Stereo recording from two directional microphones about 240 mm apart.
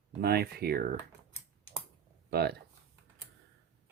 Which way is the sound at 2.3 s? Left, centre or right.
Right.